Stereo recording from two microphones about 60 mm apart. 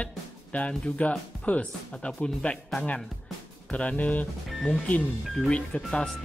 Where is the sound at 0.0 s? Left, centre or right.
Left.